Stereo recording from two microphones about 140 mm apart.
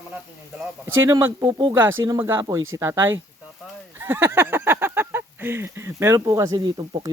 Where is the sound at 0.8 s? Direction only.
15° right (ahead or behind).